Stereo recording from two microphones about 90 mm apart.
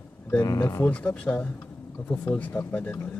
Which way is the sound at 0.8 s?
15° left (ahead or behind).